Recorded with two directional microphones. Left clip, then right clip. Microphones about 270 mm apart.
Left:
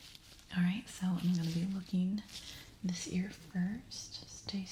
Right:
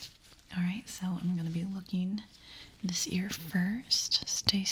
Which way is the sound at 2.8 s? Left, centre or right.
Right.